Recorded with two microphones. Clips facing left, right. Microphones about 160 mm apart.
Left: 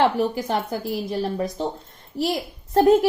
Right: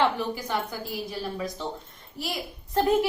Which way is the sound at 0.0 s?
40° left (ahead or behind).